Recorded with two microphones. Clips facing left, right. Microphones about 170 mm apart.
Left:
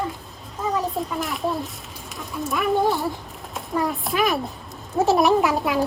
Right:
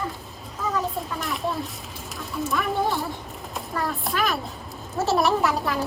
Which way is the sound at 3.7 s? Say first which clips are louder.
Left 5 dB; 15° left (ahead or behind).